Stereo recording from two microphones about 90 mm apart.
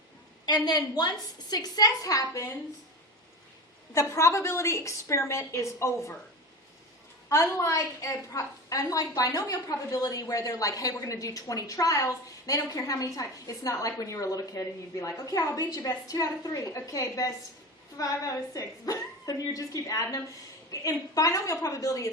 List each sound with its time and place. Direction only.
0.4 s a woman's voice: 50° left (ahead or behind)
4.1 s a woman's voice: 35° left (ahead or behind)
7.3 s a woman's voice: 35° left (ahead or behind)